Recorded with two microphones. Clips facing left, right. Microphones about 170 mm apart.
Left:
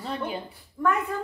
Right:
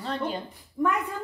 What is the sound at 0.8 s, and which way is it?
Speech, 20° right (ahead or behind).